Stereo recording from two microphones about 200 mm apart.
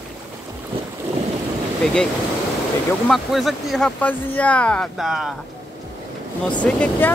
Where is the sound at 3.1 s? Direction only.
Centre (ahead or behind).